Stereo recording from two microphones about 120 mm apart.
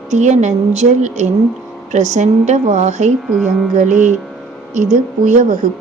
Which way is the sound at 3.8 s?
90° right.